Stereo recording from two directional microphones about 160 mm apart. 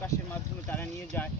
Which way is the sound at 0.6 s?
10° left (ahead or behind).